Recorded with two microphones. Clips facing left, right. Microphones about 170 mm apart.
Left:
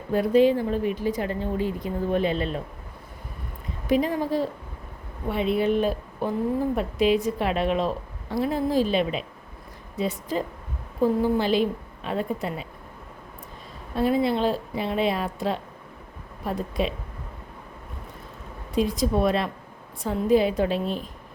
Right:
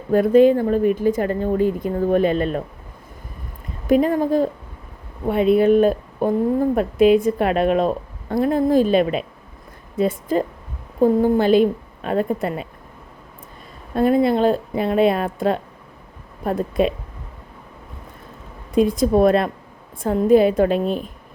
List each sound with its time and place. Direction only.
0.1 s a woman's voice: 50° right (ahead or behind)
3.8 s a woman's voice: 50° right (ahead or behind)
13.9 s a woman's voice: 50° right (ahead or behind)
18.7 s a woman's voice: 50° right (ahead or behind)